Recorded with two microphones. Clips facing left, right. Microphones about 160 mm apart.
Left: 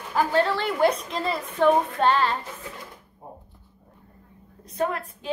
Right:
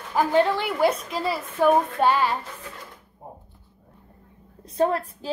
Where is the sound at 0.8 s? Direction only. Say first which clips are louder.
Left 1 dB; 5° right (ahead or behind).